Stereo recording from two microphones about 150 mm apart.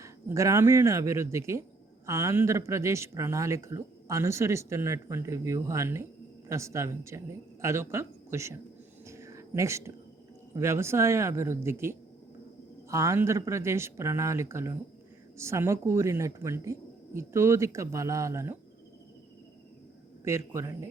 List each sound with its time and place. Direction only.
0.0 s speech: 20° right (ahead or behind)
9.0 s a sound: 20° right (ahead or behind)
10.5 s speech: 20° right (ahead or behind)
20.2 s speech: 20° right (ahead or behind)